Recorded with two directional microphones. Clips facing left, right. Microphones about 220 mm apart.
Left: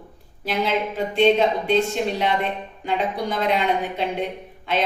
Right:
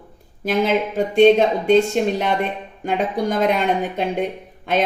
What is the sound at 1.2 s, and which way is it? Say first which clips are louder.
Speech: right 5 dB; 50° right (ahead or behind).